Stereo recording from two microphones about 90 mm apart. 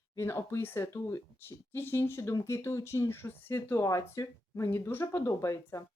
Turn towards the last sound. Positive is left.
turn(degrees=40)  # may be behind; listen again after turning